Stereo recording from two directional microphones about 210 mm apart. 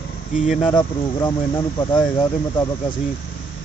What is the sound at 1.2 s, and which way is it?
Speech, 20° left (ahead or behind).